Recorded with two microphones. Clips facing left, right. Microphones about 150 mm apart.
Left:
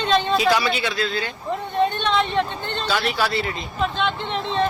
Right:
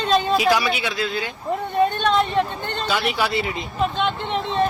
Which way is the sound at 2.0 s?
45° right (ahead or behind).